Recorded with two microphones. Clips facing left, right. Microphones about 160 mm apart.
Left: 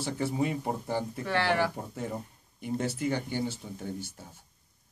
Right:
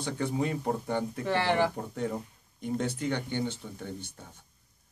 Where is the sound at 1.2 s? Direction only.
20° right (ahead or behind).